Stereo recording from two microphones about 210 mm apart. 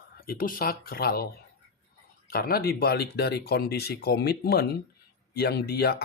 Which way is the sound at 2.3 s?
45° left (ahead or behind).